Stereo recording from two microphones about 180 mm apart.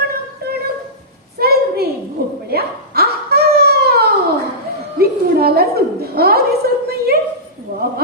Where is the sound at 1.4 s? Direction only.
60° right (ahead or behind).